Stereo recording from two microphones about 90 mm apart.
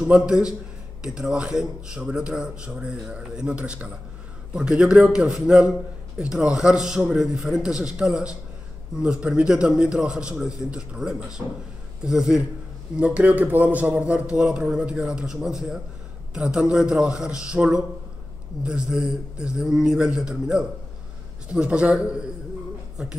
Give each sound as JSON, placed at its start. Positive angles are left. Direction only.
{"t": 0.0, "sound": "a man's voice", "side_deg": -10}